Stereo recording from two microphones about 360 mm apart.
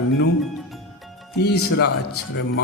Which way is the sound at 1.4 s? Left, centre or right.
Left.